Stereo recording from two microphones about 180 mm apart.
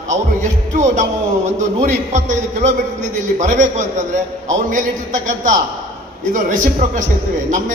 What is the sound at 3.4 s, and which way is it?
A man's voice, 45° right (ahead or behind).